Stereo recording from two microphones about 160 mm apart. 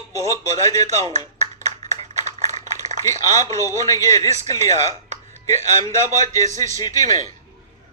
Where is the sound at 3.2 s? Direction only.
20° left (ahead or behind).